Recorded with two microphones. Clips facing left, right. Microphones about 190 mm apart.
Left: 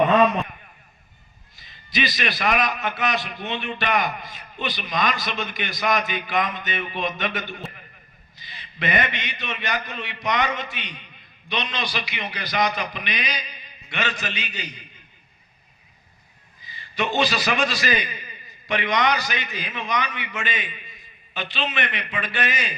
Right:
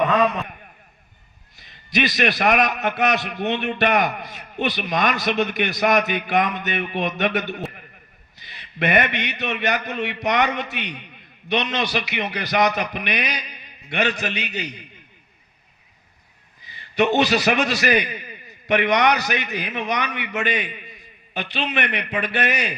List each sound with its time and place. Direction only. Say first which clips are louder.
1.6 s a man's voice: right 4 dB; 65° right (ahead or behind)
16.7 s a man's voice: right 6 dB; 65° right (ahead or behind)